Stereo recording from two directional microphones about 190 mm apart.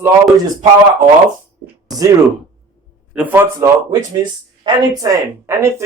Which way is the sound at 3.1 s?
10° right (ahead or behind).